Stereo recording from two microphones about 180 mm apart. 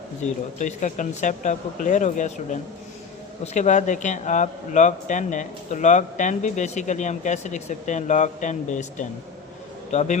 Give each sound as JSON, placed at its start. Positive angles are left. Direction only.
{"t": 0.2, "sound": "a man's voice", "side_deg": 40}